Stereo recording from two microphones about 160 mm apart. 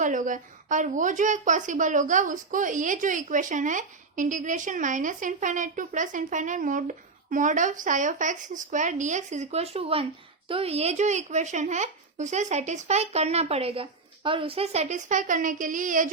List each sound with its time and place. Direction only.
0.0 s a woman's voice: 55° right (ahead or behind)